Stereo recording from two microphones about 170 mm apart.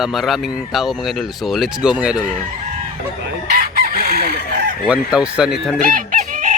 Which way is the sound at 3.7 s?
65° right (ahead or behind).